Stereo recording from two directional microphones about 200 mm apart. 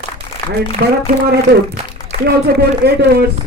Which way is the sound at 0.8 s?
50° right (ahead or behind).